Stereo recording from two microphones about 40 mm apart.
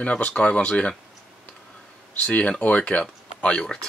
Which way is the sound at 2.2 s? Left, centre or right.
Left.